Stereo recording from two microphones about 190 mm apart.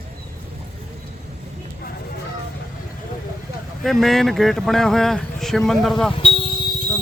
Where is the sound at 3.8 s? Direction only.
Centre (ahead or behind).